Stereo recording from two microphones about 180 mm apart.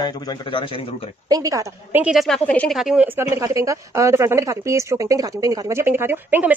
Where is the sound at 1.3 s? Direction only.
20° right (ahead or behind).